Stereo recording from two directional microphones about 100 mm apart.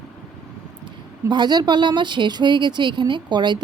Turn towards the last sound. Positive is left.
turn(degrees=-50)  # may be behind; listen again after turning